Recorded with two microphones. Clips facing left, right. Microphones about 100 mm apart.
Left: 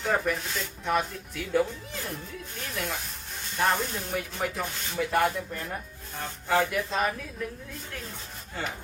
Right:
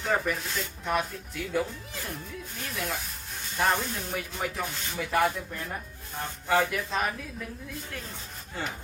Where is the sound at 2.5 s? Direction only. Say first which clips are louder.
Even; centre (ahead or behind).